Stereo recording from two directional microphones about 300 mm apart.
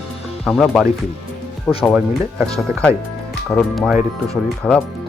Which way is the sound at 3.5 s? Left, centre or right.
Centre.